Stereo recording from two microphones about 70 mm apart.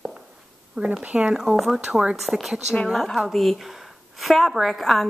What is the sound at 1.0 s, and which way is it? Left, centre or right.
Speech, centre.